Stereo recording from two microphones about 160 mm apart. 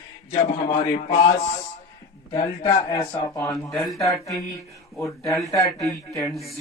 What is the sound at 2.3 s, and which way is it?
Speech, 30° left (ahead or behind).